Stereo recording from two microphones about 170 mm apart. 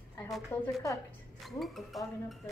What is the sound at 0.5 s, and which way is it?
Speech, 10° left (ahead or behind).